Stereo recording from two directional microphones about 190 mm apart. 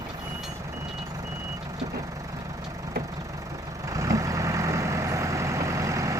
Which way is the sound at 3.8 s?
15° right (ahead or behind).